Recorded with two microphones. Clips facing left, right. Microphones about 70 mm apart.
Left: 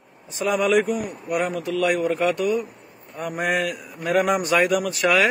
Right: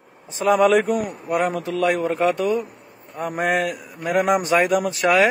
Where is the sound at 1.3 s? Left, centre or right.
Right.